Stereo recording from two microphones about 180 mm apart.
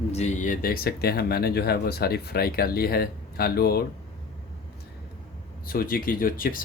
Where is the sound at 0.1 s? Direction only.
40° left (ahead or behind); by 3.8 s 60° left (ahead or behind).